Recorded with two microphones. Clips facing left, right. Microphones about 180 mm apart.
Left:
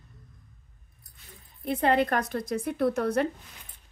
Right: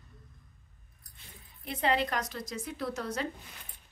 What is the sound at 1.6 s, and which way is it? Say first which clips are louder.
A woman's voice: left 6 dB; 55° left (ahead or behind).